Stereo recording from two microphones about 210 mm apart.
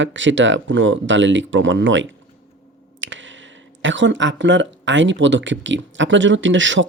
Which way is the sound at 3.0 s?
60° right (ahead or behind).